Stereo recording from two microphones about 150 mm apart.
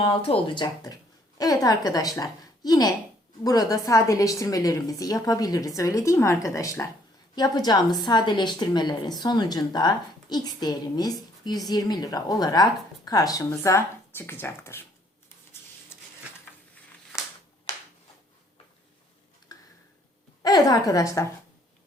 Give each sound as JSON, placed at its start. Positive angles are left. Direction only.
{"t": 0.0, "sound": "a woman's voice", "side_deg": 40}
{"t": 19.5, "sound": "a sound", "side_deg": 25}
{"t": 20.4, "sound": "a woman's voice", "side_deg": 25}